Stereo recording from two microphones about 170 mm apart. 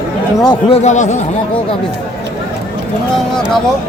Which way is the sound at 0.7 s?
45° left (ahead or behind).